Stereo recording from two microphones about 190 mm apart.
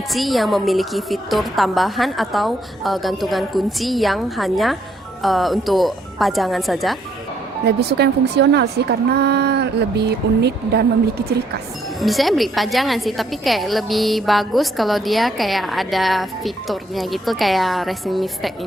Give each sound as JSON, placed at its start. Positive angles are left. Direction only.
{"t": 0.1, "sound": "a woman's voice", "side_deg": 0}
{"t": 7.8, "sound": "speech", "side_deg": -60}
{"t": 11.9, "sound": "a woman's voice", "side_deg": 0}